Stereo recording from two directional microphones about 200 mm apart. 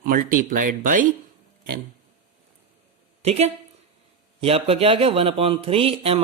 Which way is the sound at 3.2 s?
30° right (ahead or behind).